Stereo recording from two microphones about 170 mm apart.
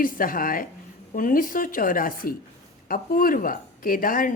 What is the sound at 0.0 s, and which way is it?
A woman's voice, 55° left (ahead or behind).